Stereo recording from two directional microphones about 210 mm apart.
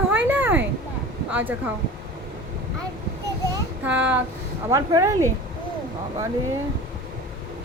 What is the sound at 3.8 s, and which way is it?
Speech, 5° right (ahead or behind).